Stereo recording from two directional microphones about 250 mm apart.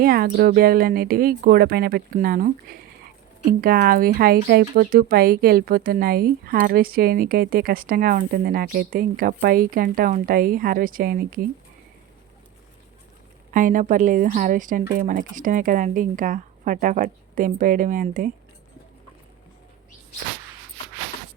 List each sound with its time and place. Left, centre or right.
0.0 s speech: right
3.6 s speech: right
13.5 s speech: right